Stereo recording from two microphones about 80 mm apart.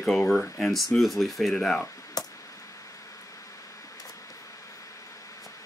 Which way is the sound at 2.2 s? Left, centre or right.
Left.